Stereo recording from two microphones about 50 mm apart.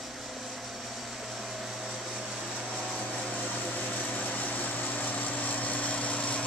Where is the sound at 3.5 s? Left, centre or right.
Left.